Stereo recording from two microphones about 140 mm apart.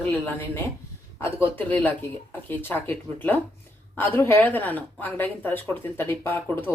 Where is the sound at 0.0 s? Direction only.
15° left (ahead or behind).